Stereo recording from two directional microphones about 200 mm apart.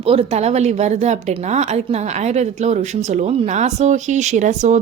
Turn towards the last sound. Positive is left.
turn(degrees=-35)  # may be behind; listen again after turning